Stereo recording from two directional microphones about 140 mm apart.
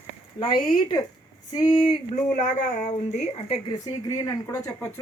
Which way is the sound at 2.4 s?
60° left (ahead or behind).